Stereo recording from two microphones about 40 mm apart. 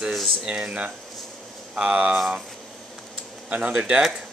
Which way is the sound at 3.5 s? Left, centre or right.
Right.